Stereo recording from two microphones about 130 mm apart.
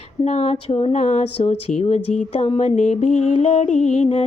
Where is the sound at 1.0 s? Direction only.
65° left (ahead or behind).